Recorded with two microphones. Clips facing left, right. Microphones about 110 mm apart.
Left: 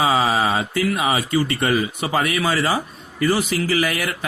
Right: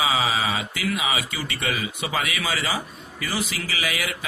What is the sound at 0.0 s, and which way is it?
Mantra, 40° left (ahead or behind).